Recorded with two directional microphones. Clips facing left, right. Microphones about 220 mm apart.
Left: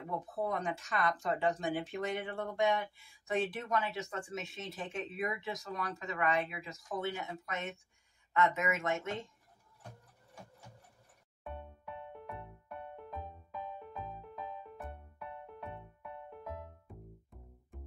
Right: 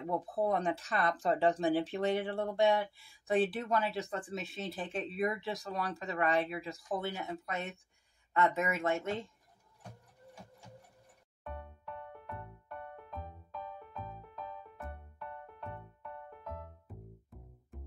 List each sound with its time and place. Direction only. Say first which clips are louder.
0.4 s speech: right 4 dB; 35° right (ahead or behind)
12.9 s music: left 1 dB; 5° left (ahead or behind)
16.3 s music: left 1 dB; 5° left (ahead or behind)